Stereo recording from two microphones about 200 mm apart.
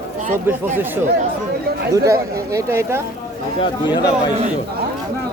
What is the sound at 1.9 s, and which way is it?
Speech, 15° right (ahead or behind).